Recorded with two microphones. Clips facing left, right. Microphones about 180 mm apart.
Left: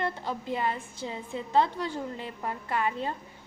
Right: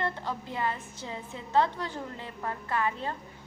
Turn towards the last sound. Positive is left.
turn(degrees=15)  # may be behind; listen again after turning